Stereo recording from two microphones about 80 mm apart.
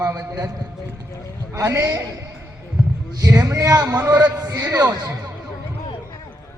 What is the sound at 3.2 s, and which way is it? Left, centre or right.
Speech, right.